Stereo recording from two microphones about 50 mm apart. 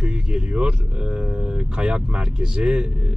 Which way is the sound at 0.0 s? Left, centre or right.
Centre.